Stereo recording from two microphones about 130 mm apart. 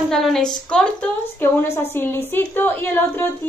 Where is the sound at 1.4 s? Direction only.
15° left (ahead or behind).